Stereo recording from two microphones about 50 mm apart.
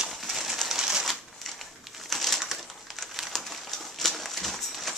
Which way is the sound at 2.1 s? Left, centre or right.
Centre.